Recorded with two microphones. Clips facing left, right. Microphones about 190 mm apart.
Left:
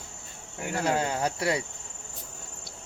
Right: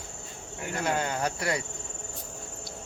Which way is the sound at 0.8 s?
30° left (ahead or behind).